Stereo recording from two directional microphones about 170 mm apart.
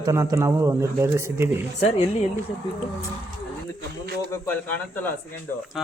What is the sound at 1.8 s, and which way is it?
Speech, 40° left (ahead or behind).